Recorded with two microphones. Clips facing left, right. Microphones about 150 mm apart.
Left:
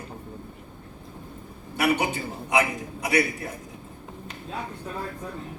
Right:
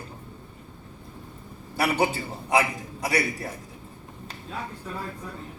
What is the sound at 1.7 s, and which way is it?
Speech, 35° right (ahead or behind).